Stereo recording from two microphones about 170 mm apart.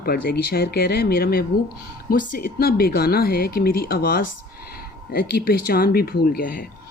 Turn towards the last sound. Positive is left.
turn(degrees=55)  # may be behind; listen again after turning